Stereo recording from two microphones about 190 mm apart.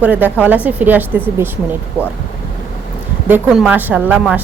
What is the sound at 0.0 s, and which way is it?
A woman's voice, 10° right (ahead or behind).